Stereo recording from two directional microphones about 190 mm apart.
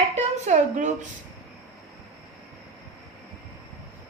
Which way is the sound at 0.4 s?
40° right (ahead or behind).